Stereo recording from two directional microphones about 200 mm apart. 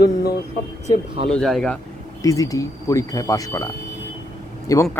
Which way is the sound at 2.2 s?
15° left (ahead or behind).